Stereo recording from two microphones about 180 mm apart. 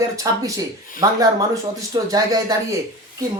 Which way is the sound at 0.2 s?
20° right (ahead or behind).